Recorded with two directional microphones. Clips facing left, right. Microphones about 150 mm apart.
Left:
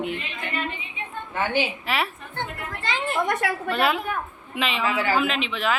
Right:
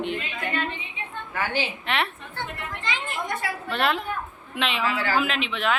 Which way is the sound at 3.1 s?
70° left (ahead or behind).